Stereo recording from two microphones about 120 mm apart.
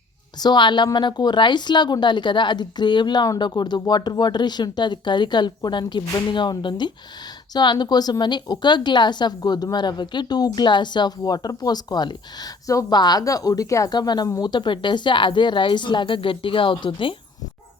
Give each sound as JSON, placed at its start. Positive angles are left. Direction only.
{"t": 0.3, "sound": "a woman's voice", "side_deg": 35}